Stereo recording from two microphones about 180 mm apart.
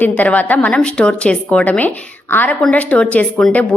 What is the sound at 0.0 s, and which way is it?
A woman's voice, 10° left (ahead or behind).